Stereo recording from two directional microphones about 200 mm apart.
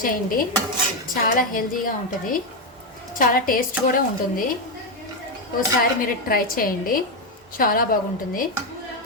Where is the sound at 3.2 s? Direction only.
45° left (ahead or behind).